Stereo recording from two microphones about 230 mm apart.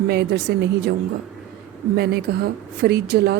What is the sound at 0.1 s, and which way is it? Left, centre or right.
Speech, right.